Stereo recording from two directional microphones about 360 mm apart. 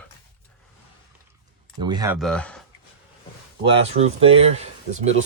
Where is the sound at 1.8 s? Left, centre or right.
Centre.